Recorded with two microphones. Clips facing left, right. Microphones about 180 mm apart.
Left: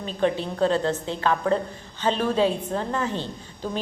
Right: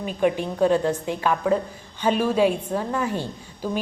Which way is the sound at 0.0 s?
15° right (ahead or behind).